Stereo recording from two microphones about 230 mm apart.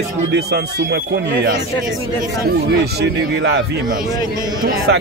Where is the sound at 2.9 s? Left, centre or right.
Right.